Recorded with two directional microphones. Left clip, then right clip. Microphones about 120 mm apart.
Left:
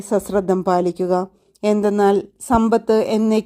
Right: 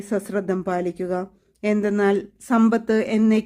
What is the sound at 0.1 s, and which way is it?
A woman's voice, 30° left (ahead or behind).